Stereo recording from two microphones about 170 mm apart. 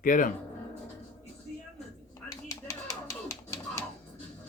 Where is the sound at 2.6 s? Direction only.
20° left (ahead or behind).